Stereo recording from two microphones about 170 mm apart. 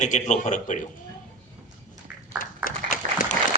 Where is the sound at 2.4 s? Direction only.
55° left (ahead or behind).